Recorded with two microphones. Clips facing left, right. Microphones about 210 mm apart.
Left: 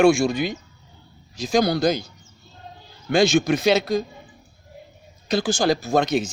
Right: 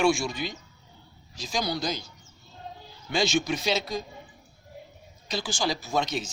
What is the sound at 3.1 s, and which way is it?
Speech, 50° left (ahead or behind).